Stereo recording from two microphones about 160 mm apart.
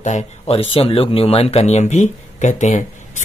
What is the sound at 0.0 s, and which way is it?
Speech, 45° left (ahead or behind).